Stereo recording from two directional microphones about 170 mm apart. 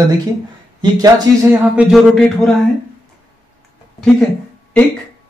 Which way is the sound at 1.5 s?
5° right (ahead or behind).